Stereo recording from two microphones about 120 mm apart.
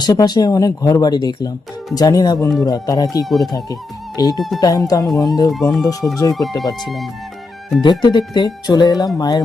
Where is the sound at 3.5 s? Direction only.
30° left (ahead or behind).